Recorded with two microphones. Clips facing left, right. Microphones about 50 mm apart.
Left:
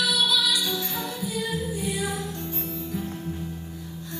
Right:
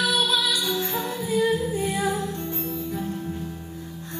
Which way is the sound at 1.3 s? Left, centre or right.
Right.